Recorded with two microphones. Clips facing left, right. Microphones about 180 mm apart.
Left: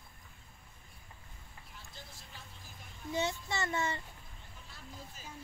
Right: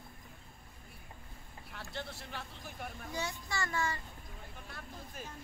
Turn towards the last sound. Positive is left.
turn(degrees=-55)  # may be behind; listen again after turning